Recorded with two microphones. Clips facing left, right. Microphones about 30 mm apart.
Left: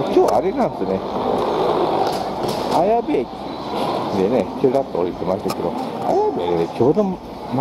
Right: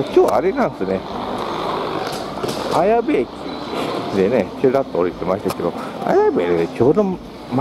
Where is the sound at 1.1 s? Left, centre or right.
Right.